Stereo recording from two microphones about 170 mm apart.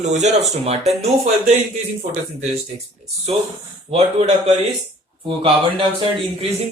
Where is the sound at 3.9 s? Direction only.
40° right (ahead or behind).